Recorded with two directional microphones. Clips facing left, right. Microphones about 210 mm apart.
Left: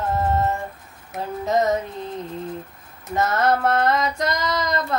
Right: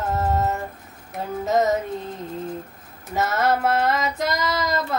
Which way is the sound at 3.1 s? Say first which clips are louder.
Left 1 dB; 5° right (ahead or behind).